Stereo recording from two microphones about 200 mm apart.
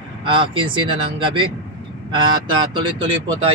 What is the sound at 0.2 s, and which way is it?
Speech, 25° right (ahead or behind).